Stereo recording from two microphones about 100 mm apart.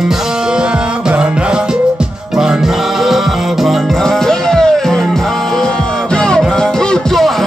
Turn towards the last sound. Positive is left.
turn(degrees=0)  # may be behind; listen again after turning